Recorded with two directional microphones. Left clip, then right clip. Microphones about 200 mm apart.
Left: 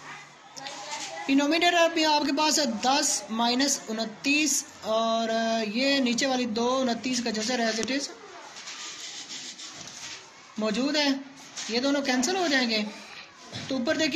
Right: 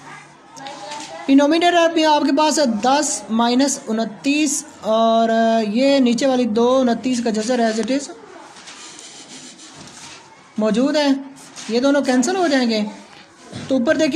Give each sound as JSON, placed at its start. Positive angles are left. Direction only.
{"t": 1.2, "sound": "a man's voice", "side_deg": -50}
{"t": 10.6, "sound": "a man's voice", "side_deg": -50}